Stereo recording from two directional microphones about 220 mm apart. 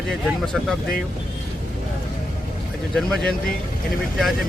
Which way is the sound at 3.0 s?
Centre (ahead or behind).